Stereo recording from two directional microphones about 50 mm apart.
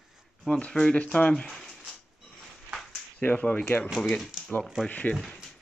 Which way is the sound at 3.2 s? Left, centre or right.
Left.